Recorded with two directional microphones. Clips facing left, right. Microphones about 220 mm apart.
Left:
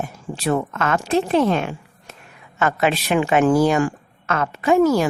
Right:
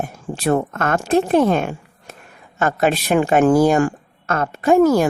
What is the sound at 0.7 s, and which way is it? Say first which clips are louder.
A woman's voice: right 2 dB; 50° right (ahead or behind).